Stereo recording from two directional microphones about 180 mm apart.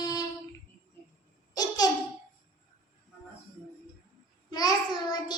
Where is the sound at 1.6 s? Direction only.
20° left (ahead or behind).